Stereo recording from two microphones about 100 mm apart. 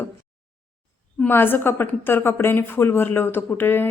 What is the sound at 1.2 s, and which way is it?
A woman's voice, 20° left (ahead or behind).